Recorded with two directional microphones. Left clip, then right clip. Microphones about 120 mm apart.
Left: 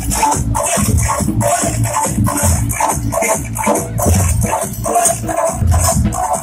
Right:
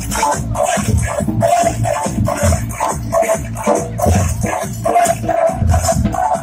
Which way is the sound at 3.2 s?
5° right (ahead or behind).